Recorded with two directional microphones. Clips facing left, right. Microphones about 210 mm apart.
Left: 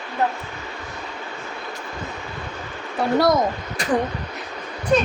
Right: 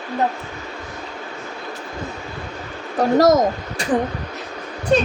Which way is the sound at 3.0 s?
45° right (ahead or behind).